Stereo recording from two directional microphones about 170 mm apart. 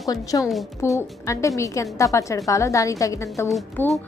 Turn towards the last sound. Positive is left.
turn(degrees=10)  # may be behind; listen again after turning